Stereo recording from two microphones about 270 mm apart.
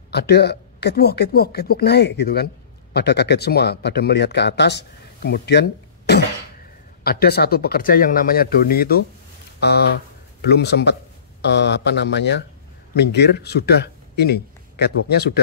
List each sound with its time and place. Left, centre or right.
0.1 s speech: left